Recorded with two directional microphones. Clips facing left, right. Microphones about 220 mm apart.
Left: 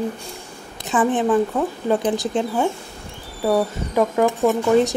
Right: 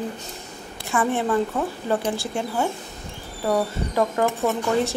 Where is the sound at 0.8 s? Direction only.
20° left (ahead or behind).